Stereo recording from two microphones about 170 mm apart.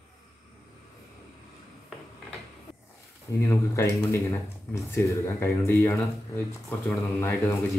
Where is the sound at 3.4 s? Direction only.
15° left (ahead or behind).